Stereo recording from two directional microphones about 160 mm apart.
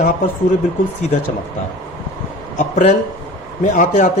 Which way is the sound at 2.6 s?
45° left (ahead or behind).